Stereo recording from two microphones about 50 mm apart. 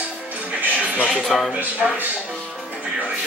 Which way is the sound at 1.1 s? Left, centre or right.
Centre.